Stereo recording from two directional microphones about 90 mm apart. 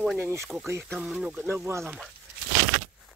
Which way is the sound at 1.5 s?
30° right (ahead or behind).